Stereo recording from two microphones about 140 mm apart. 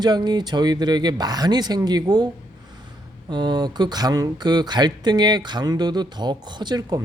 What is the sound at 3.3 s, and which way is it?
Speech, 30° right (ahead or behind).